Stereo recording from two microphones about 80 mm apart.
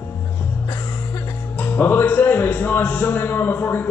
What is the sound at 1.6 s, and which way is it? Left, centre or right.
A man's voice, left.